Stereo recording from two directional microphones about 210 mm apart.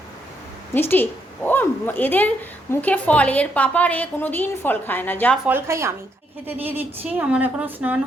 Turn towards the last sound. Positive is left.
turn(degrees=-10)  # may be behind; listen again after turning